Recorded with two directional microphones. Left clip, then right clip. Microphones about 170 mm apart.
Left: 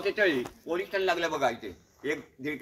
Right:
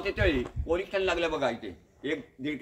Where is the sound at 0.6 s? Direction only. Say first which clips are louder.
Right 1 dB; 5° left (ahead or behind).